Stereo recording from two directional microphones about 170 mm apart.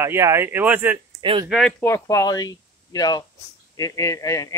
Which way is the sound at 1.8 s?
15° left (ahead or behind).